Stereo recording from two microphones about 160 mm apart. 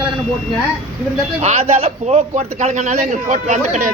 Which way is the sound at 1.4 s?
45° right (ahead or behind).